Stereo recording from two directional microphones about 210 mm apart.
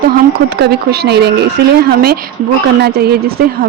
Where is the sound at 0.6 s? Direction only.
50° right (ahead or behind).